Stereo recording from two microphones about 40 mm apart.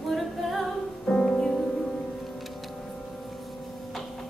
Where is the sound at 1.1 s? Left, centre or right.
Left.